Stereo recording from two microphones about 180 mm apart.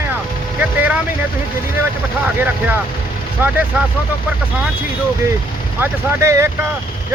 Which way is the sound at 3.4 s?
10° right (ahead or behind).